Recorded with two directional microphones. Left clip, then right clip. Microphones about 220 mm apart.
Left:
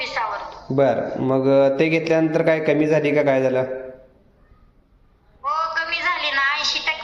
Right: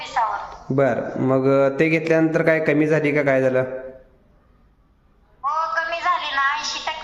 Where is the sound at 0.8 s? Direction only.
30° right (ahead or behind).